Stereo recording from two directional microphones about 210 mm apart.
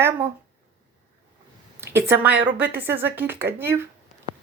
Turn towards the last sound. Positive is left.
turn(degrees=-10)  # may be behind; listen again after turning